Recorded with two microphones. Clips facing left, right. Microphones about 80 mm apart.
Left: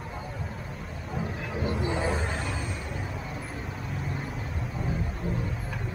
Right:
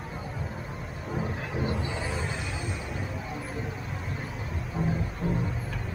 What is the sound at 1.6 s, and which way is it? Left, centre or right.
Vehicle, centre.